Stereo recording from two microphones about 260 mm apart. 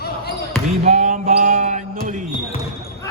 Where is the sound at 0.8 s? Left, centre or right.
Right.